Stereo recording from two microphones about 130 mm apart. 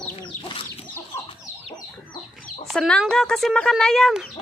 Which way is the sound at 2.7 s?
Centre (ahead or behind).